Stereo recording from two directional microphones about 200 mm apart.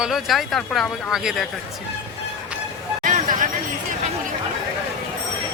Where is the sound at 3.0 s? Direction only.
40° right (ahead or behind).